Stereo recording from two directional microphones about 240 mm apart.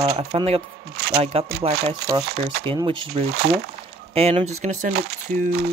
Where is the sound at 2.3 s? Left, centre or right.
Right.